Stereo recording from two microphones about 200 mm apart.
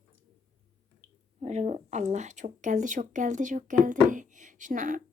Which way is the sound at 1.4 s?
35° right (ahead or behind).